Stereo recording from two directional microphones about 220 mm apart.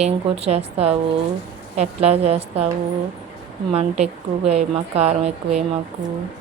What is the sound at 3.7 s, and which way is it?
Speech, 30° right (ahead or behind).